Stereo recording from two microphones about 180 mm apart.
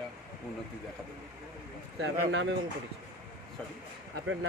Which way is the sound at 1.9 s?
90° right.